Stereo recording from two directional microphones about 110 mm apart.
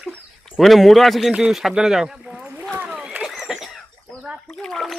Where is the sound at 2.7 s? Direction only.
15° right (ahead or behind).